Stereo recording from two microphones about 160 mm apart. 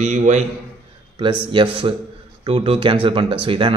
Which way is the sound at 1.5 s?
30° right (ahead or behind).